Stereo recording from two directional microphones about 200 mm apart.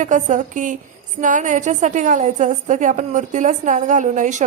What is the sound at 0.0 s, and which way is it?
A woman's voice, 40° right (ahead or behind).